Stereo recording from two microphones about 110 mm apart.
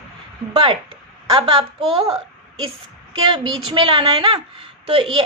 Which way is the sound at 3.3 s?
45° right (ahead or behind).